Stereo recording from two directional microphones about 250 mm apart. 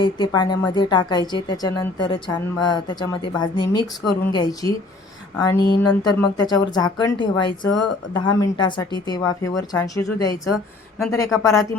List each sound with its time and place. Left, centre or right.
0.0 s a woman's voice: centre